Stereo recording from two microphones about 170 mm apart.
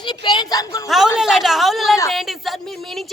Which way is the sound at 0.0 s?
25° left (ahead or behind).